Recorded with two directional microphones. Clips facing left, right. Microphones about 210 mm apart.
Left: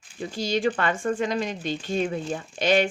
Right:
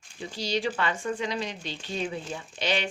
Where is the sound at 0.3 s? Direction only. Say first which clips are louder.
Left 4 dB; 50° left (ahead or behind).